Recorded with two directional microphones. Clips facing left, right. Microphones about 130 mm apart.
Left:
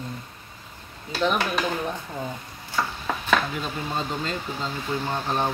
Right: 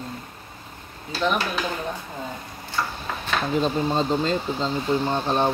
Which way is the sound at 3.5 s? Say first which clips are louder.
Right 8 dB; 30° right (ahead or behind).